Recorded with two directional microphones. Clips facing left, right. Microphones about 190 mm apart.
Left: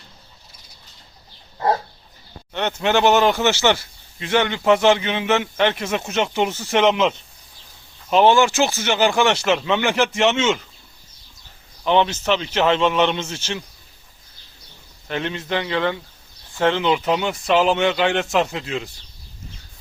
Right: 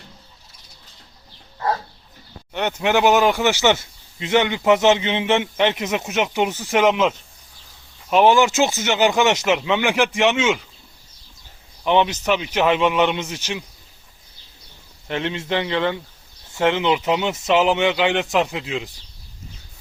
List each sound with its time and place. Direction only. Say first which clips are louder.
2.5 s speech: even; 15° right (ahead or behind)
8.3 s speech: even; 20° right (ahead or behind)
11.8 s speech: even; 15° right (ahead or behind)
15.0 s speech: right 1 dB; 20° right (ahead or behind)